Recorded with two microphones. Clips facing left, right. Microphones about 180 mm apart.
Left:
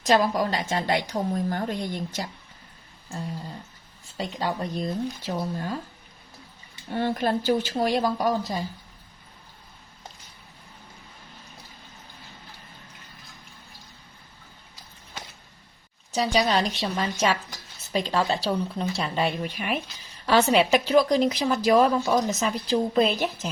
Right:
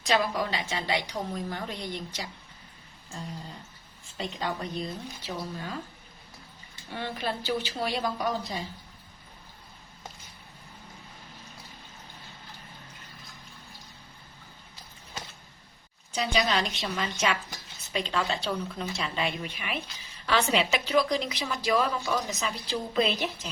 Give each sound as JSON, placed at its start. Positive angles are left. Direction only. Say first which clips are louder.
{"t": 0.0, "sound": "a woman's voice", "louder": "left 5 dB", "side_deg": 45}
{"t": 4.2, "sound": "a woman's voice", "louder": "left 4 dB", "side_deg": 40}
{"t": 6.9, "sound": "a woman's voice", "louder": "left 8 dB", "side_deg": 45}
{"t": 16.1, "sound": "a woman's voice", "louder": "left 4 dB", "side_deg": 40}